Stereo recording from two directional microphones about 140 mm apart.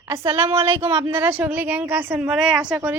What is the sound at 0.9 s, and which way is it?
A woman's voice, 15° right (ahead or behind).